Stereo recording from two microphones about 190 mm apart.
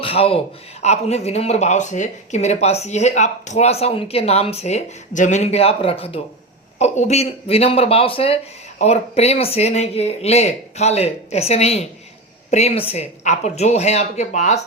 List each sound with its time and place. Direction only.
0.0 s a man's voice: 30° left (ahead or behind)